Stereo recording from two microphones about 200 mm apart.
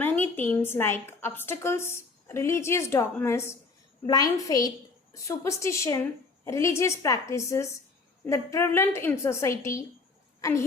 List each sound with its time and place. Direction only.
0.0 s a woman's voice: 10° left (ahead or behind)